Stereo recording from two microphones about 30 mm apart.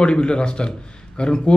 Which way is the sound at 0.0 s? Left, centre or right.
Left.